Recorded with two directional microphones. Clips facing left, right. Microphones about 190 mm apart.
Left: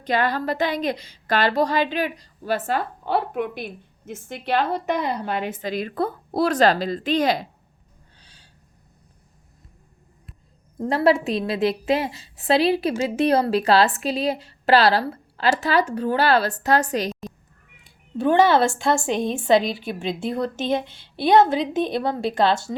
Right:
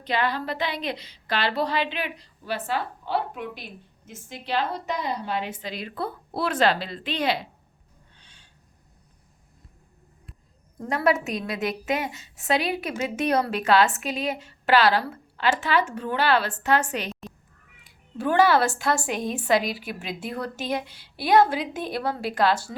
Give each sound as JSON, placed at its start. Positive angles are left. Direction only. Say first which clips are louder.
{"t": 0.0, "sound": "a woman's voice", "louder": "left 4 dB", "side_deg": 45}
{"t": 8.2, "sound": "snort", "louder": "left 2 dB", "side_deg": 35}
{"t": 10.8, "sound": "a woman's voice", "louder": "left 5 dB", "side_deg": 30}
{"t": 17.1, "sound": "cat", "louder": "left 5 dB", "side_deg": 0}
{"t": 17.8, "sound": "a woman's voice", "louder": "left 6 dB", "side_deg": 25}